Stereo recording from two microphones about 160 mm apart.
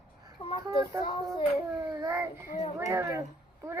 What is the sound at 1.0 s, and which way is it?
Child singing, 30° left (ahead or behind).